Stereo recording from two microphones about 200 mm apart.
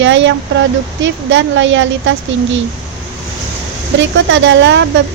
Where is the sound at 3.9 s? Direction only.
65° right (ahead or behind).